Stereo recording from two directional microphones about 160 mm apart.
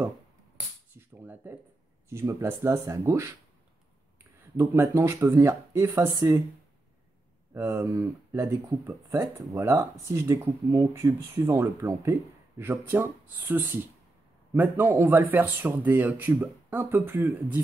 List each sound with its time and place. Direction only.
0.9 s a sound: 10° right (ahead or behind)
2.0 s speech: 20° right (ahead or behind)
4.6 s speech: 15° right (ahead or behind)
7.5 s speech: 15° right (ahead or behind)